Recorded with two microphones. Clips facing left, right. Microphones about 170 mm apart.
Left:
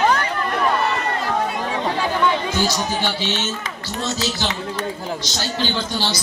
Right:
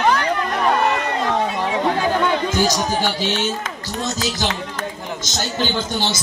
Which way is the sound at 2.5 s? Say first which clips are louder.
Right 2 dB; 45° right (ahead or behind).